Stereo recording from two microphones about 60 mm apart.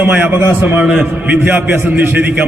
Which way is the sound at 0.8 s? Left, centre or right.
Right.